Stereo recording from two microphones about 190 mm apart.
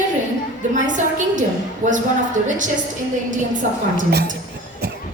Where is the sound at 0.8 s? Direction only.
40° right (ahead or behind).